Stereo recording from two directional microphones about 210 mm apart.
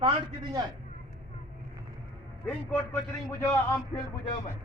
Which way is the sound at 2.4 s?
10° left (ahead or behind).